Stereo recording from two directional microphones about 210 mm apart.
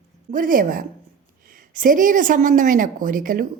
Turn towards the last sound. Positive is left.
turn(degrees=-40)  # may be behind; listen again after turning